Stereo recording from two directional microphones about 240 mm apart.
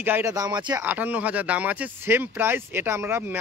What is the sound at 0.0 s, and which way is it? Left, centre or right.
Speech, centre.